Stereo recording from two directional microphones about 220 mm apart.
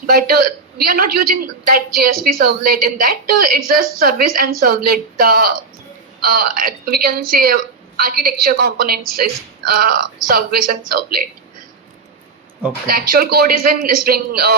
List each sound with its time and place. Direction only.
0.1 s a woman's voice: 45° right (ahead or behind)
12.9 s a woman's voice: 40° right (ahead or behind)